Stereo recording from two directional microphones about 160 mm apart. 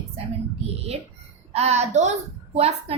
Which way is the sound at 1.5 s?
40° right (ahead or behind).